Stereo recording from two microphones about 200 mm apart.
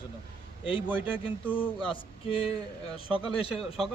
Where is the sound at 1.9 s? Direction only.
25° left (ahead or behind).